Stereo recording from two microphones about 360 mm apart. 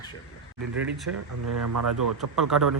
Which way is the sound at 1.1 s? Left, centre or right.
Right.